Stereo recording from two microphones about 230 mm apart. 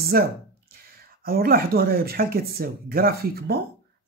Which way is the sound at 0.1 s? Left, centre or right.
Right.